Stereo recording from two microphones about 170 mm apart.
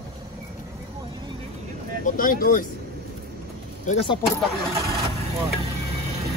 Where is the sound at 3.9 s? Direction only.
45° left (ahead or behind).